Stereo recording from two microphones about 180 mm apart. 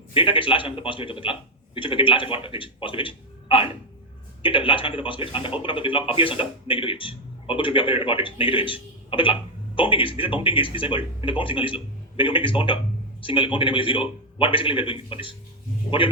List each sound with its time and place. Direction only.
0.1 s speech: 30° left (ahead or behind)